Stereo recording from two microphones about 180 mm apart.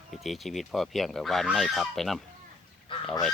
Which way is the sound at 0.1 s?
Centre (ahead or behind).